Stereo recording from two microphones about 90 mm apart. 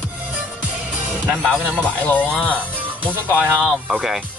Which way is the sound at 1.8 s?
15° left (ahead or behind).